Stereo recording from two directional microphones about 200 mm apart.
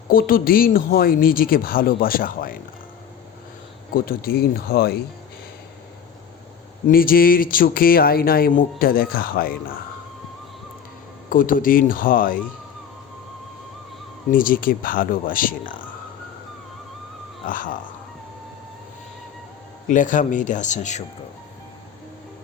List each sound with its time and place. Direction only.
0.1 s speech: 45° left (ahead or behind)
3.9 s speech: 45° left (ahead or behind)
6.8 s speech: 45° left (ahead or behind)
11.3 s speech: 45° left (ahead or behind)
14.3 s speech: 45° left (ahead or behind)
17.4 s speech: 40° left (ahead or behind)
19.9 s speech: 40° left (ahead or behind)